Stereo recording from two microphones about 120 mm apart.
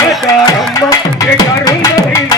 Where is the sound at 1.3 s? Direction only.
30° left (ahead or behind).